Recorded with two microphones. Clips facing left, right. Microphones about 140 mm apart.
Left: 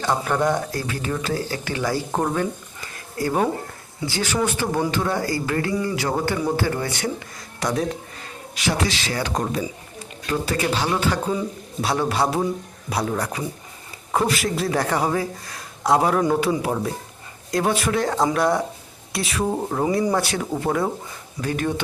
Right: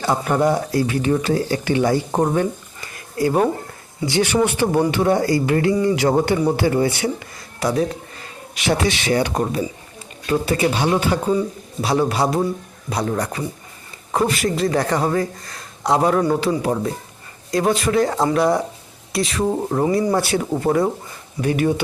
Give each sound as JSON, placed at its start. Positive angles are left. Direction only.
{"t": 0.0, "sound": "speech", "side_deg": -10}
{"t": 1.2, "sound": "speech", "side_deg": -25}
{"t": 4.3, "sound": "speech", "side_deg": -15}
{"t": 8.5, "sound": "speech", "side_deg": -25}
{"t": 9.3, "sound": "speech", "side_deg": -5}
{"t": 10.5, "sound": "speech", "side_deg": -15}
{"t": 11.3, "sound": "speech", "side_deg": 0}